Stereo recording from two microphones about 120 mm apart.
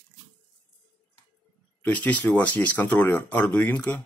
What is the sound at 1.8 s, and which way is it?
Speech, 10° left (ahead or behind).